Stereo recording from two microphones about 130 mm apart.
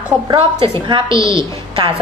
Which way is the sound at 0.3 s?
40° right (ahead or behind).